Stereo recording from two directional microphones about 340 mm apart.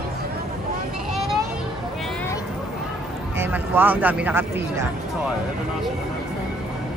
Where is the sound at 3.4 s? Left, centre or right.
Centre.